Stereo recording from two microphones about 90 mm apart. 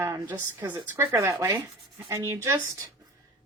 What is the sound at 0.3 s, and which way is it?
Speech, 25° right (ahead or behind).